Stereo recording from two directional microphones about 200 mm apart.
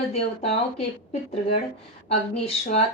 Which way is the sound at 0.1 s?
30° left (ahead or behind).